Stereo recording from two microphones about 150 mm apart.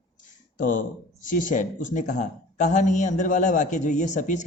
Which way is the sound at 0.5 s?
65° left (ahead or behind).